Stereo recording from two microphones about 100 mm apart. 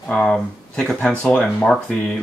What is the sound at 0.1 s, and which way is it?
Speech, 5° left (ahead or behind).